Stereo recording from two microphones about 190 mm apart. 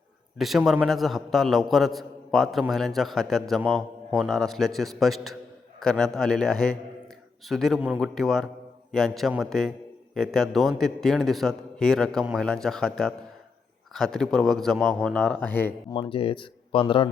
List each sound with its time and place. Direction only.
0.3 s a man's voice: centre (ahead or behind)
16.0 s speech: 30° left (ahead or behind)